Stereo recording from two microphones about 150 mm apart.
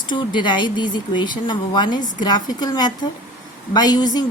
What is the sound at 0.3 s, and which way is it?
A woman's voice, 30° left (ahead or behind).